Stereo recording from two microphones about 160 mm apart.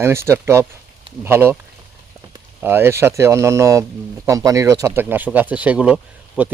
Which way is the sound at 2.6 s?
15° right (ahead or behind).